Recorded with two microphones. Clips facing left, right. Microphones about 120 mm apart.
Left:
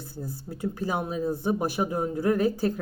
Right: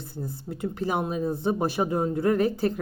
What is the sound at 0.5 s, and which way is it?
Speech, 15° right (ahead or behind).